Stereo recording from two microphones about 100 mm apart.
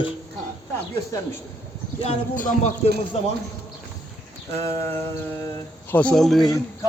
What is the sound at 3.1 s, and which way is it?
Speech, 90° left.